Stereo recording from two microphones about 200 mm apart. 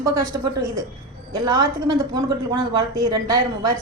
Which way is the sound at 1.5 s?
20° right (ahead or behind).